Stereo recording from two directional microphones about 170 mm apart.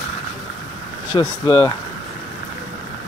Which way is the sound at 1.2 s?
15° left (ahead or behind).